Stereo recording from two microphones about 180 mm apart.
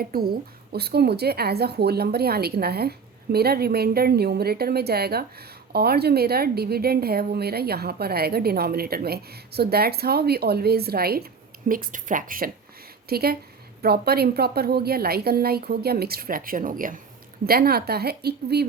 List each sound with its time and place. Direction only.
0.0 s a woman's voice: 55° right (ahead or behind)